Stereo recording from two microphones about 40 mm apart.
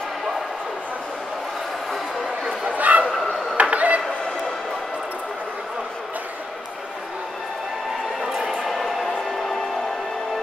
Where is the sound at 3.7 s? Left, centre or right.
Right.